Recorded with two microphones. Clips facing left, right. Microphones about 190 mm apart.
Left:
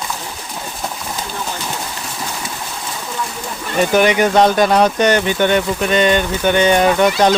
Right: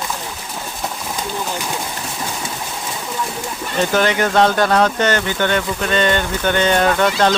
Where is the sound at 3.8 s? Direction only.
15° left (ahead or behind).